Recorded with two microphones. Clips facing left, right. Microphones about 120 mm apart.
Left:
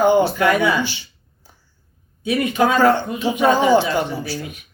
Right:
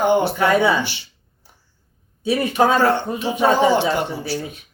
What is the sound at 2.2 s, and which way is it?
Speech, 30° right (ahead or behind).